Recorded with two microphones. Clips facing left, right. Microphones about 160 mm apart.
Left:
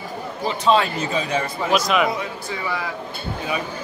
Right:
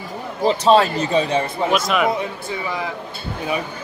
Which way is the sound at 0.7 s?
35° right (ahead or behind).